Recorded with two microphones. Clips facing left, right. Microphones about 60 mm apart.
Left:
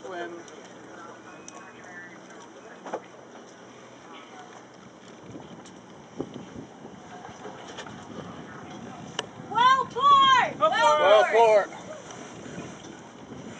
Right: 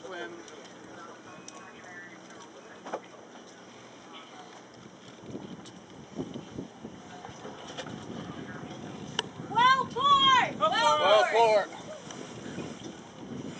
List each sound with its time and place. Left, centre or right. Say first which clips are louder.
0.0 s pigeon: left 4 dB; centre
2.9 s vehicle: left 3 dB; centre
7.4 s bird: even; centre
9.7 s a sound: left 5 dB; centre